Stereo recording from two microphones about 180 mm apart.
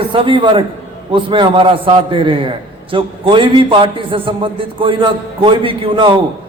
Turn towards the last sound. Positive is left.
turn(degrees=-25)  # may be behind; listen again after turning